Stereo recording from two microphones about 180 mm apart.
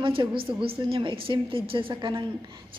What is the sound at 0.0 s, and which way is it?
A woman's voice, 30° right (ahead or behind).